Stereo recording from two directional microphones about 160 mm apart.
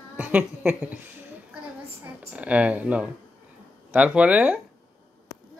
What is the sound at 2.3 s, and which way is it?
A woman's voice, 10° right (ahead or behind).